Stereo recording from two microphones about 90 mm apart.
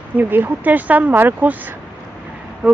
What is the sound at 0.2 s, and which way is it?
Speech, 20° right (ahead or behind).